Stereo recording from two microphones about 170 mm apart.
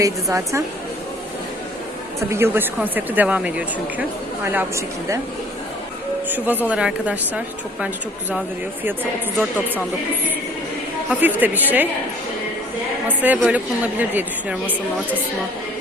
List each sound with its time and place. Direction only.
0.0 s a woman's voice: 20° right (ahead or behind)
2.3 s a woman's voice: 15° right (ahead or behind)
6.2 s a woman's voice: 10° right (ahead or behind)
9.4 s a woman's voice: 10° right (ahead or behind)
11.1 s a woman's voice: 10° right (ahead or behind)
13.1 s a woman's voice: 10° right (ahead or behind)